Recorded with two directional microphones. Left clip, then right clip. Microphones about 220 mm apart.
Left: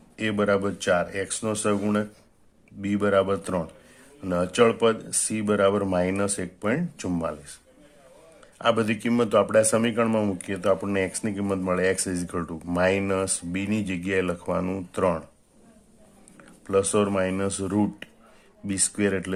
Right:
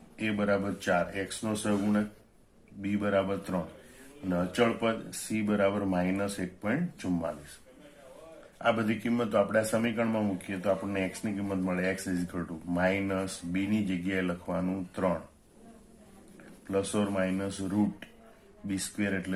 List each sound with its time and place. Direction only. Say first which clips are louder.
0.2 s speech: left 6 dB; 50° left (ahead or behind)
8.5 s speech: left 5 dB; 45° left (ahead or behind)
16.6 s speech: left 8 dB; 50° left (ahead or behind)